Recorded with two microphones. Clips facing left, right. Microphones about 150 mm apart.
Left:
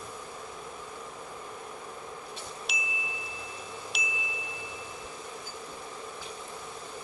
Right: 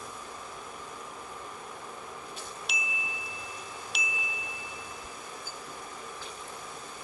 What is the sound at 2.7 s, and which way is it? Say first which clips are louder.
Chime: even; centre (ahead or behind).